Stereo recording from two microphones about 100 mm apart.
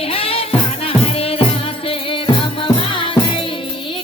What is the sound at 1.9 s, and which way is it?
Music, 60° left (ahead or behind).